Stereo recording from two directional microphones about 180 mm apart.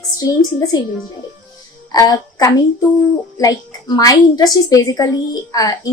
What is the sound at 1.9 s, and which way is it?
A woman's voice, 20° left (ahead or behind).